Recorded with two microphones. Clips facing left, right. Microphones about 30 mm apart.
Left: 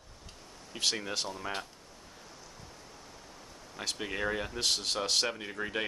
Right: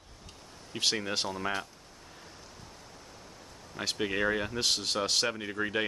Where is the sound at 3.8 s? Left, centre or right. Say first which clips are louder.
Right 4 dB; centre.